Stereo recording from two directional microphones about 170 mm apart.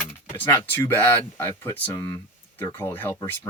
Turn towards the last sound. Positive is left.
turn(degrees=15)  # may be behind; listen again after turning